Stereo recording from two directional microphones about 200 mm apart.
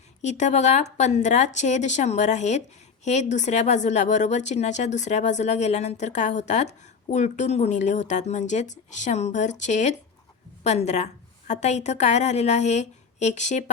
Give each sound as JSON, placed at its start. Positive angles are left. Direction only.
{"t": 0.2, "sound": "a woman's voice", "side_deg": 35}